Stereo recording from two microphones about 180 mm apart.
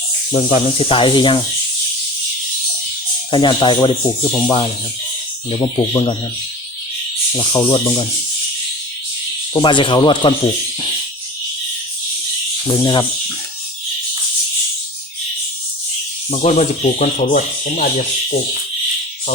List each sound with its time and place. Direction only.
0.5 s speech: 30° left (ahead or behind)
3.3 s speech: 25° left (ahead or behind)
7.3 s speech: 25° left (ahead or behind)
9.5 s speech: 25° left (ahead or behind)
12.8 s speech: 25° left (ahead or behind)
16.3 s speech: 35° left (ahead or behind)